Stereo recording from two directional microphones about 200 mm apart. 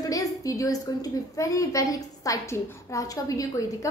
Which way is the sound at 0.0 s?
15° left (ahead or behind).